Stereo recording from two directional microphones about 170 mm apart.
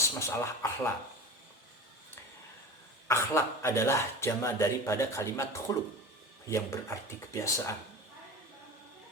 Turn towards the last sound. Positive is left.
turn(degrees=15)  # may be behind; listen again after turning